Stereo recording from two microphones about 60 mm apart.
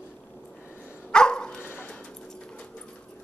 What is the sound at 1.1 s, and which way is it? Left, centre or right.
Dog, centre.